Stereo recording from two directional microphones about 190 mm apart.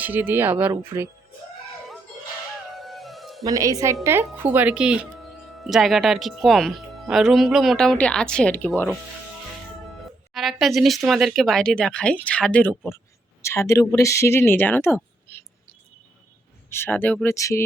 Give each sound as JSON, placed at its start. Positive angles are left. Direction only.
{"t": 0.0, "sound": "speech", "side_deg": -10}
{"t": 2.7, "sound": "music", "side_deg": 0}
{"t": 3.4, "sound": "speech", "side_deg": -20}
{"t": 10.3, "sound": "a woman's voice", "side_deg": 0}
{"t": 16.6, "sound": "speech", "side_deg": 10}